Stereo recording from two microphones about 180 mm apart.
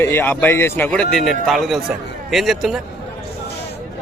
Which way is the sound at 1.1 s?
Centre (ahead or behind).